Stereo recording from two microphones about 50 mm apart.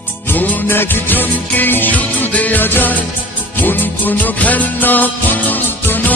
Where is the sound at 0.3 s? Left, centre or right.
Left.